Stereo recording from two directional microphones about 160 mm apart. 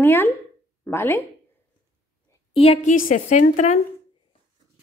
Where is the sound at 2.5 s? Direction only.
40° left (ahead or behind).